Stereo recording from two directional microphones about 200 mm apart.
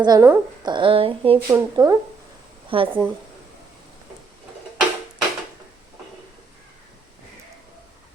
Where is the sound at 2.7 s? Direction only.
25° right (ahead or behind).